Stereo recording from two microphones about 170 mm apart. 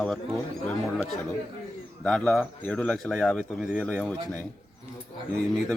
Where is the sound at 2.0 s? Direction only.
5° left (ahead or behind).